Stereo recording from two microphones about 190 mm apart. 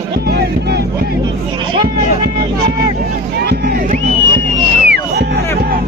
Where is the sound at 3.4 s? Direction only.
55° right (ahead or behind).